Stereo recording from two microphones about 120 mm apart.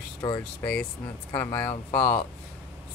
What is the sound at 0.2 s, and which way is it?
Speech, 25° left (ahead or behind).